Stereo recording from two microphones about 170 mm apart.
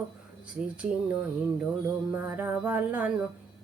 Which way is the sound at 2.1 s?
10° right (ahead or behind).